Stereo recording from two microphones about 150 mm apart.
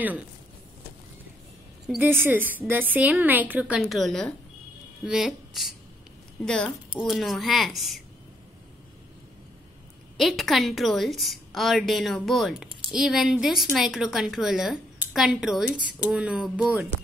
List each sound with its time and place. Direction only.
1.9 s a woman's voice: 10° right (ahead or behind)
10.1 s a woman's voice: centre (ahead or behind)